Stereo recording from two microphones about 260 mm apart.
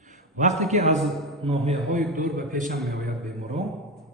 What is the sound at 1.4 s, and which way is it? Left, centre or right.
A man's voice, right.